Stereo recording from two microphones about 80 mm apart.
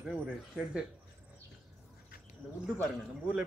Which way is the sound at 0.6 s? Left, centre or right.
Centre.